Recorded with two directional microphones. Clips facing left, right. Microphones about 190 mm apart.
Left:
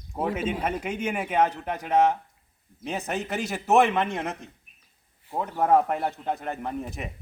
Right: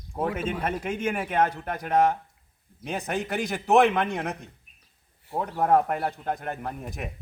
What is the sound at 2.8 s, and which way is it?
Speech, 10° right (ahead or behind).